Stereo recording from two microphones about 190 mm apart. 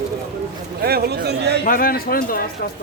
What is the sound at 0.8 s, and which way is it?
Speech, 55° right (ahead or behind).